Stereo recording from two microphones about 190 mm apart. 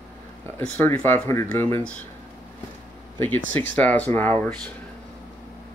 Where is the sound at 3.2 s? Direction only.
10° left (ahead or behind).